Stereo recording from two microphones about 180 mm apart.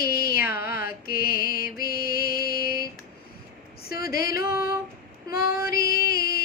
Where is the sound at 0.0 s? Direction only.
60° left (ahead or behind).